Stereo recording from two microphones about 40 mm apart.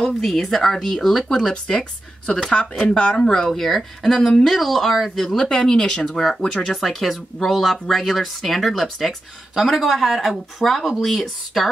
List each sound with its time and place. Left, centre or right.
0.0 s speech: centre
3.4 s speech: centre
5.4 s speech: centre